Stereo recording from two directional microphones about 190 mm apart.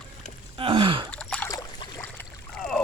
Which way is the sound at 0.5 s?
25° right (ahead or behind).